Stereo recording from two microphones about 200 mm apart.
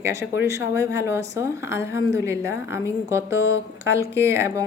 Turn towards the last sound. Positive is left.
turn(degrees=-15)  # may be behind; listen again after turning